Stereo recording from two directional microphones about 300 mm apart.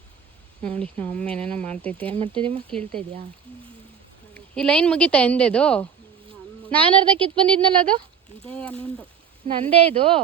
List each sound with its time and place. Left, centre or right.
0.6 s a woman's voice: centre
2.2 s speech: centre
4.5 s a woman's voice: centre
6.8 s speech: centre
8.4 s a woman's voice: centre
9.5 s speech: centre